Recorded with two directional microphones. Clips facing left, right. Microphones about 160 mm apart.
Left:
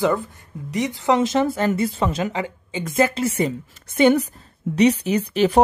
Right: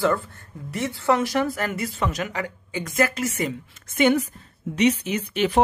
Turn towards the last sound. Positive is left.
turn(degrees=35)  # may be behind; listen again after turning